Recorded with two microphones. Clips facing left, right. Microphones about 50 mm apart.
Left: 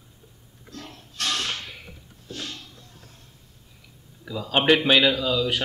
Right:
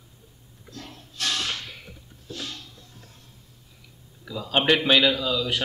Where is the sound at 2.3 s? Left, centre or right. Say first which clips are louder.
Even; left.